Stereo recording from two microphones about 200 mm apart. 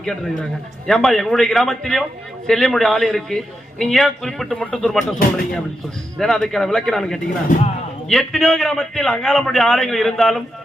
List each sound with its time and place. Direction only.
0.0 s a man's voice: 5° left (ahead or behind)
6.1 s a man's voice: centre (ahead or behind)
7.5 s speech: 40° left (ahead or behind)
8.0 s a man's voice: centre (ahead or behind)